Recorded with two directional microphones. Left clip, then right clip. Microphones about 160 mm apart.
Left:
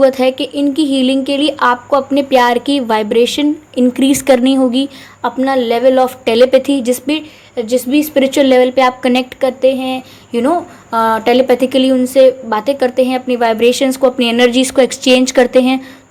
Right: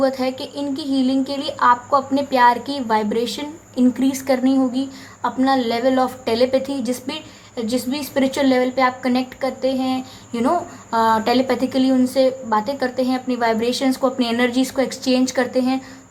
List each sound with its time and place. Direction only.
0.0 s speech: 35° left (ahead or behind)